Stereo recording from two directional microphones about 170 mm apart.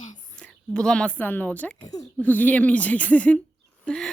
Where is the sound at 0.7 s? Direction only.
5° left (ahead or behind).